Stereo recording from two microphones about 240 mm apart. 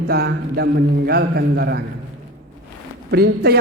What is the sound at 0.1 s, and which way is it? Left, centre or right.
A man's voice, right.